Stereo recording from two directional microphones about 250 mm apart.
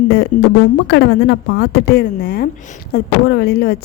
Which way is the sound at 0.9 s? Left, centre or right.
Left.